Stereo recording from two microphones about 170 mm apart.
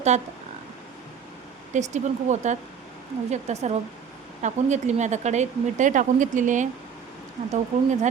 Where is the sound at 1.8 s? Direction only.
45° right (ahead or behind).